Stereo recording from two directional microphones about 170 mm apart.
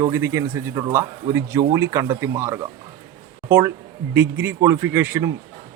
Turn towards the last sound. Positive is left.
turn(degrees=-10)  # may be behind; listen again after turning